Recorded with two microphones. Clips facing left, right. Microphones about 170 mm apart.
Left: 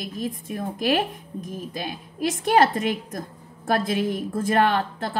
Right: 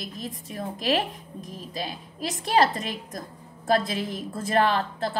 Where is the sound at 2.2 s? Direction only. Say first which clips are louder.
Left 3 dB; 60° left (ahead or behind).